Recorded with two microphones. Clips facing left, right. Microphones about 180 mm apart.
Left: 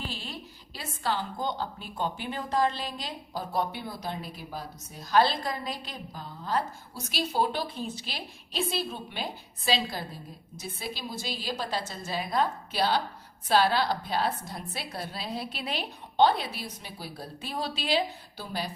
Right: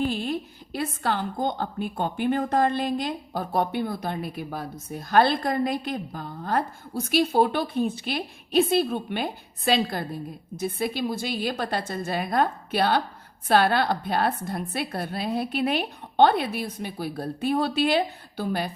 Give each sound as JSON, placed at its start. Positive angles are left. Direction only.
{"t": 0.0, "sound": "a woman's voice", "side_deg": -55}